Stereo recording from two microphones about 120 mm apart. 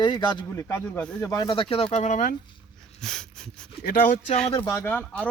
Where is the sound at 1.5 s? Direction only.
50° left (ahead or behind); by 2.2 s 75° left (ahead or behind).